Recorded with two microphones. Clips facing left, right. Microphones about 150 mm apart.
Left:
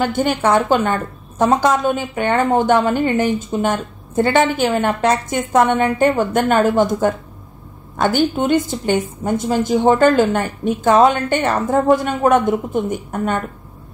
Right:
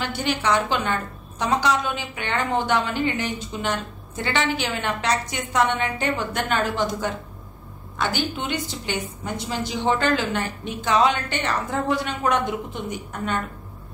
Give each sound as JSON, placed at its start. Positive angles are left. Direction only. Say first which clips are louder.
{"t": 0.0, "sound": "a woman's voice", "louder": "left 8 dB", "side_deg": 50}